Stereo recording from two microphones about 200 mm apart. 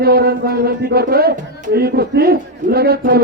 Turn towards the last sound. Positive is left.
turn(degrees=-50)  # may be behind; listen again after turning